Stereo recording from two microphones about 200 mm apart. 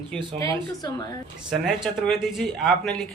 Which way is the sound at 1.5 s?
Centre (ahead or behind).